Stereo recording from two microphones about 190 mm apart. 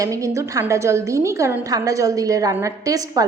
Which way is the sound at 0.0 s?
15° right (ahead or behind).